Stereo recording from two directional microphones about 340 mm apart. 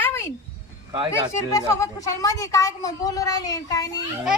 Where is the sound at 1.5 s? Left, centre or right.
Centre.